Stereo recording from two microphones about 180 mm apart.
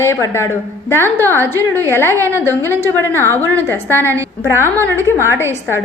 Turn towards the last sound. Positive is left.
turn(degrees=15)  # may be behind; listen again after turning